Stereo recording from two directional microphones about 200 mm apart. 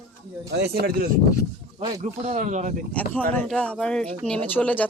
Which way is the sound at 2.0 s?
35° right (ahead or behind).